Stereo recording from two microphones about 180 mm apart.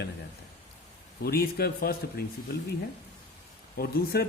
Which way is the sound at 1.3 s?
60° left (ahead or behind).